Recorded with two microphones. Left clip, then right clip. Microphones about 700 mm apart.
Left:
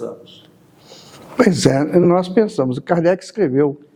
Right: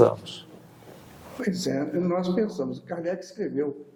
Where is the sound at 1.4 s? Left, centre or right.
Left.